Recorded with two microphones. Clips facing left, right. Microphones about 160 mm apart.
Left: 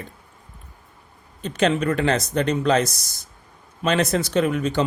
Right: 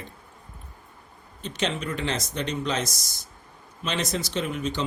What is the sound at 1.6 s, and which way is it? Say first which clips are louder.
Speech: left 9 dB; 60° left (ahead or behind).